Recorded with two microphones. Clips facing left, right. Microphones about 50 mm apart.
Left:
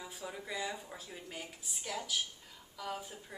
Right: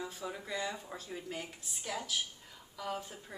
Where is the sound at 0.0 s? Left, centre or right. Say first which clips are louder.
Right 3 dB; centre.